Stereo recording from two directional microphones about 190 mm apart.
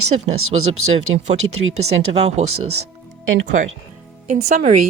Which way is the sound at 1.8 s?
35° right (ahead or behind).